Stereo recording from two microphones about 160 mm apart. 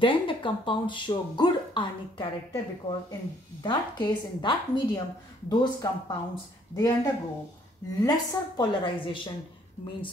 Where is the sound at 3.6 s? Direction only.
30° left (ahead or behind).